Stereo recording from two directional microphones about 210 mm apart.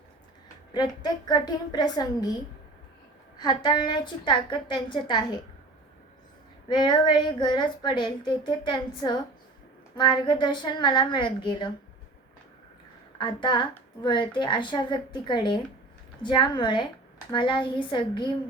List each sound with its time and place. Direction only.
0.7 s speech: 20° left (ahead or behind)
3.3 s speech: 20° left (ahead or behind)
6.7 s speech: 20° left (ahead or behind)
13.1 s speech: 20° left (ahead or behind)